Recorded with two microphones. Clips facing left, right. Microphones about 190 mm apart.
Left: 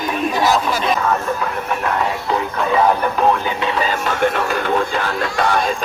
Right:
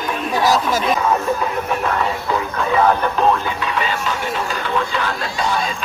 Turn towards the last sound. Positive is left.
turn(degrees=50)  # may be behind; listen again after turning